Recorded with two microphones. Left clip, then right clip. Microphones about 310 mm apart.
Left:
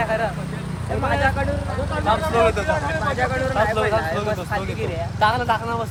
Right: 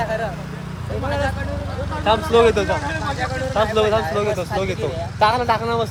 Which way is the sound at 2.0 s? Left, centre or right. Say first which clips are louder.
Right 4 dB; right.